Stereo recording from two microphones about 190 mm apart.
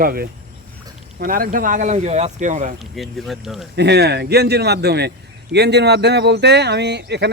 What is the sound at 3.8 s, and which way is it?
Speech, 60° right (ahead or behind).